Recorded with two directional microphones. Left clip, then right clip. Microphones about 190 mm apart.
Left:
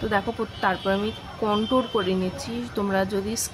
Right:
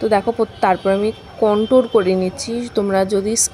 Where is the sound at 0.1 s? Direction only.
30° right (ahead or behind).